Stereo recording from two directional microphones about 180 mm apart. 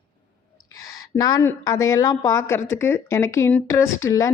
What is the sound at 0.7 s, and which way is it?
A woman's voice, 20° left (ahead or behind).